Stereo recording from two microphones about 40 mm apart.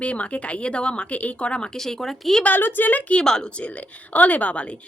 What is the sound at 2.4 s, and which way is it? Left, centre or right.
Speech, left.